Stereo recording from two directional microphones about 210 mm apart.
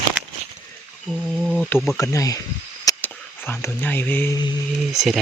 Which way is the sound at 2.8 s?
10° left (ahead or behind).